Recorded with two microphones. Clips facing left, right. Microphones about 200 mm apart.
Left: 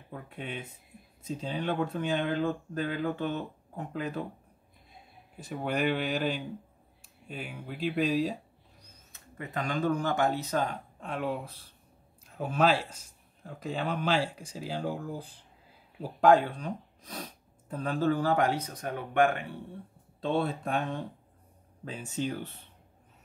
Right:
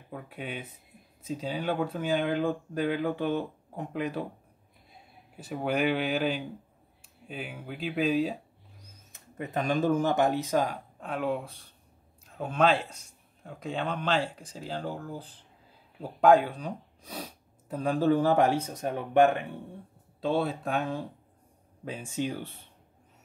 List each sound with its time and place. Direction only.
0.1 s speech: 5° right (ahead or behind)
5.4 s speech: 5° right (ahead or behind)
9.4 s speech: 25° right (ahead or behind)
11.0 s speech: centre (ahead or behind)
16.0 s speech: centre (ahead or behind); by 19.3 s 25° right (ahead or behind)
20.2 s speech: centre (ahead or behind)
21.9 s speech: 10° right (ahead or behind)